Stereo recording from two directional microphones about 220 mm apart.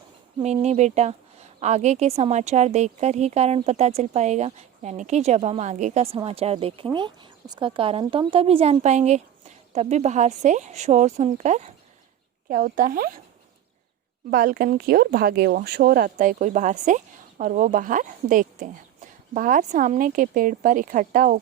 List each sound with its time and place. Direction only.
0.4 s a woman's voice: 30° right (ahead or behind)
14.3 s a woman's voice: 40° right (ahead or behind)